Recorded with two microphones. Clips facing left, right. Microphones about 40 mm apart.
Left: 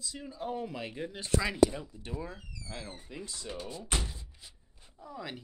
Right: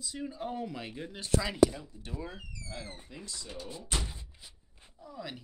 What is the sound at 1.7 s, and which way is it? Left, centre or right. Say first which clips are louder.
Speech: left 3 dB; centre.